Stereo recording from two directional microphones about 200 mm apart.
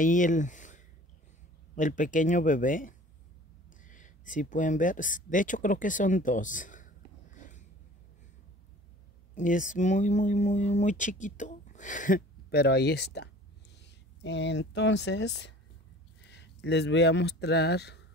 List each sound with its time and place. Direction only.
0.0 s speech: 40° left (ahead or behind)
9.3 s speech: 40° left (ahead or behind); by 18.0 s 55° left (ahead or behind)